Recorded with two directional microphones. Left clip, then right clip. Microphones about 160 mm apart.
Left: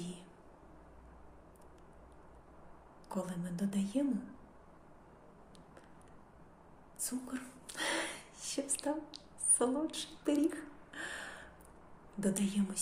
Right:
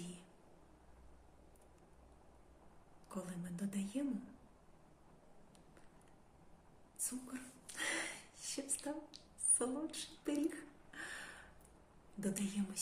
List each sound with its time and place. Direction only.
3.1 s speech: 20° right (ahead or behind)
7.0 s a sound: 20° right (ahead or behind)
12.2 s speech: 20° right (ahead or behind)